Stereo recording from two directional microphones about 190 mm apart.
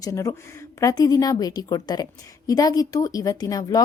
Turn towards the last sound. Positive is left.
turn(degrees=20)  # may be behind; listen again after turning